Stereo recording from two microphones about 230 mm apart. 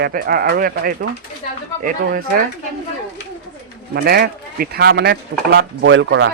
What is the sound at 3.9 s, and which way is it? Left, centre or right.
A man's voice, right.